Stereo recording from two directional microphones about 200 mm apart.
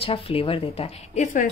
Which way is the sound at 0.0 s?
30° left (ahead or behind).